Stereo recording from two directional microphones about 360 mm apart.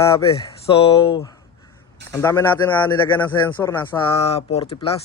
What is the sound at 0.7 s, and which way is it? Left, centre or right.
A man's voice, centre.